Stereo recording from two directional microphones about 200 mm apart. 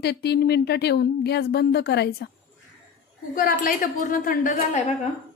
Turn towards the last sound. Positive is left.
turn(degrees=40)  # may be behind; listen again after turning